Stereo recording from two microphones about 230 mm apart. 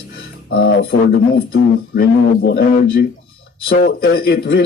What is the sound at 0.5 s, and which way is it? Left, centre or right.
Speech, left.